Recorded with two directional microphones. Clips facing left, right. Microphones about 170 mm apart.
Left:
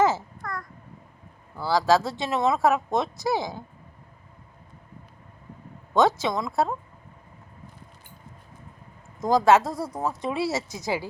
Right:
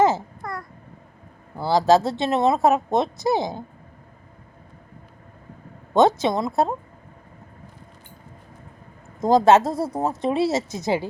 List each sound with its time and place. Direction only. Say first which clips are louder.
0.0 s babbling: right 3 dB; 15° right (ahead or behind)
1.5 s speech: right 4 dB; 20° right (ahead or behind)
2.2 s a woman's voice: right 5 dB; 60° right (ahead or behind)
2.6 s speech: right 3 dB; 20° right (ahead or behind)
5.9 s speech: right 4 dB; 20° right (ahead or behind)
9.2 s speech: right 3 dB; 20° right (ahead or behind)